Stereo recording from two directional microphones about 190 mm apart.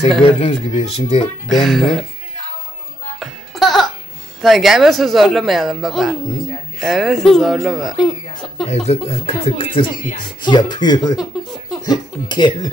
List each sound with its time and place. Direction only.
0.2 s speech: 30° left (ahead or behind)
1.5 s speech: centre (ahead or behind)
3.2 s music: centre (ahead or behind)
4.4 s speech: centre (ahead or behind)
8.6 s speech: 35° left (ahead or behind)